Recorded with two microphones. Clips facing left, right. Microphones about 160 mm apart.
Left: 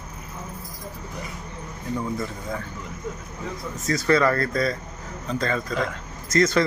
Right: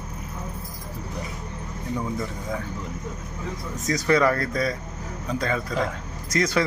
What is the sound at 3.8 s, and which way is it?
Speech, 15° right (ahead or behind).